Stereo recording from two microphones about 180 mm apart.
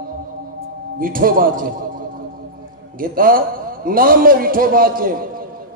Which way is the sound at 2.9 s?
50° right (ahead or behind).